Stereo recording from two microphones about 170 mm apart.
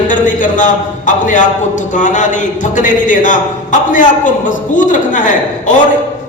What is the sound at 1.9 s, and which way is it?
A woman's voice, 45° left (ahead or behind).